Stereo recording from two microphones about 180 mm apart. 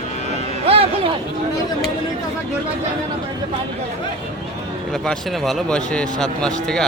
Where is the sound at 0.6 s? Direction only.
35° right (ahead or behind).